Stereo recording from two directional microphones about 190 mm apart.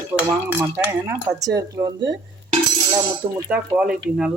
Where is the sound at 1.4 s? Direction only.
20° right (ahead or behind).